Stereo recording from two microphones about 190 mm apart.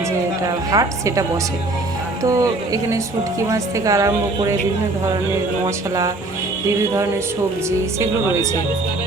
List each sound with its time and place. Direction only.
0.4 s a woman's voice: 20° right (ahead or behind)
2.2 s a woman's voice: 20° right (ahead or behind)